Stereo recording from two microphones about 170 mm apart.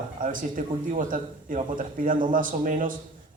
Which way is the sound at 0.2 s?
50° right (ahead or behind).